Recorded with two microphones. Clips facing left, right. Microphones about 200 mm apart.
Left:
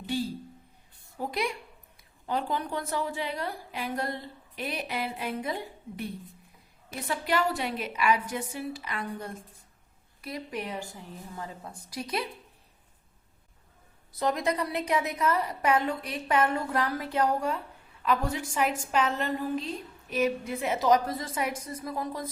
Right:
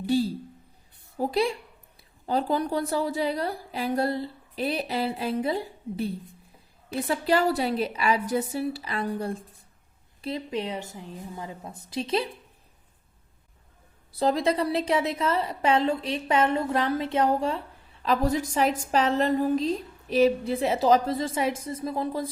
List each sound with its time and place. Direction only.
0.0 s a sound: 35° right (ahead or behind)
1.2 s a woman's voice: 30° right (ahead or behind)
14.2 s a woman's voice: 30° right (ahead or behind)